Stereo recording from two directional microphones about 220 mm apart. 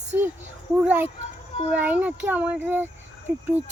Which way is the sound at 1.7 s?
5° right (ahead or behind).